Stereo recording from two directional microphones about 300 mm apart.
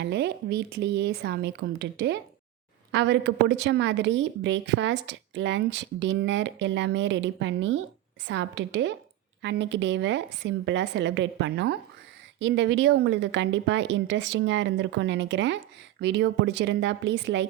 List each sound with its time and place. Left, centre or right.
0.0 s a woman's voice: right